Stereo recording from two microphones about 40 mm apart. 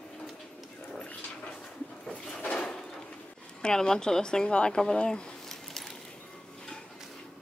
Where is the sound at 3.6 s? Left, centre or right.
Centre.